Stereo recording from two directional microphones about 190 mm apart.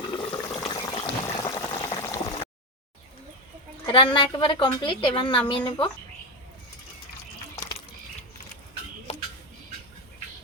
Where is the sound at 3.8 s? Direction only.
25° left (ahead or behind).